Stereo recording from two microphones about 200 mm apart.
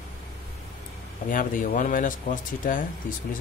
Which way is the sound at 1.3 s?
40° left (ahead or behind).